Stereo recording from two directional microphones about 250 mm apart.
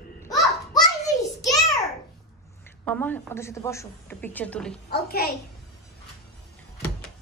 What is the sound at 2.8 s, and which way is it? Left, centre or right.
A woman's voice, centre.